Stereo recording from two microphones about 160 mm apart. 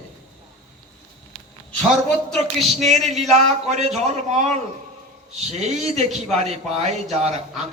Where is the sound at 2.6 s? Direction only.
45° right (ahead or behind).